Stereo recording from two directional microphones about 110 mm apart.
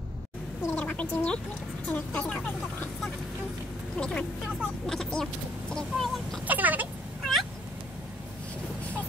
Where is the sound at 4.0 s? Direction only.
10° left (ahead or behind).